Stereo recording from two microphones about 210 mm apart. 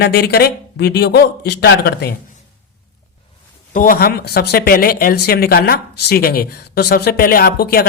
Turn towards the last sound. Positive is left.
turn(degrees=45)  # may be behind; listen again after turning